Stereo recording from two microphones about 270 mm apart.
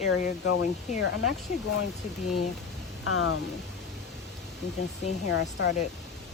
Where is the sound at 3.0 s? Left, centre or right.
Left.